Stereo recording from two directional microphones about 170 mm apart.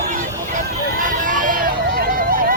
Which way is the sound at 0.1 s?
50° right (ahead or behind).